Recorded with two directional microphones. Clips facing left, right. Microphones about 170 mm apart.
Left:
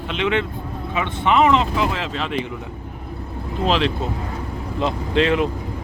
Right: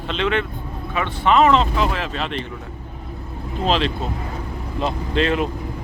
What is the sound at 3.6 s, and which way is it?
Speech, 15° left (ahead or behind).